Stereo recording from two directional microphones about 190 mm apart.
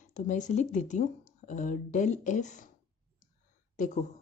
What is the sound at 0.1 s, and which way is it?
Speech, 40° left (ahead or behind).